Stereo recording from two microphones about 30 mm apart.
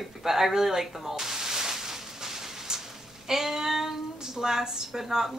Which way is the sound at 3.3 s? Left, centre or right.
Centre.